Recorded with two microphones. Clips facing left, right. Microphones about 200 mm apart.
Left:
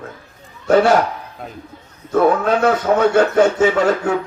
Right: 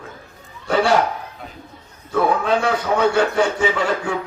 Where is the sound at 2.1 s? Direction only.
45° left (ahead or behind).